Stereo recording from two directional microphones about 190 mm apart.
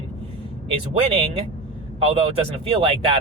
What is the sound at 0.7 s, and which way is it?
Speech, 30° right (ahead or behind).